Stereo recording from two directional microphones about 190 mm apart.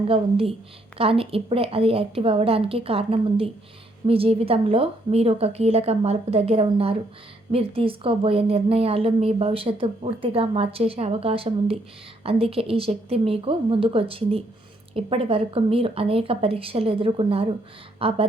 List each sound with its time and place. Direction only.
0.1 s a woman's voice: 30° right (ahead or behind)